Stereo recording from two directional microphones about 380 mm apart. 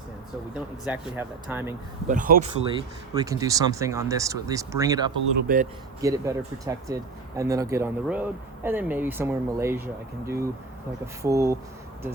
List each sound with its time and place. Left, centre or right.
0.9 s speech: centre
2.0 s speech: right
3.2 s speech: centre
5.5 s speech: right
6.0 s speech: centre